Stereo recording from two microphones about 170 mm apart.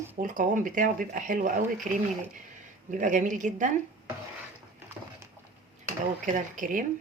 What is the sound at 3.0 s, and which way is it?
Speech, 50° right (ahead or behind).